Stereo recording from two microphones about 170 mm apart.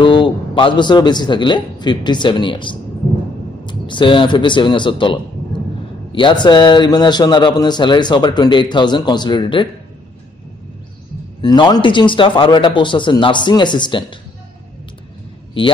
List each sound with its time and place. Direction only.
0.0 s a man's voice: 30° left (ahead or behind)
11.4 s a man's voice: 25° left (ahead or behind)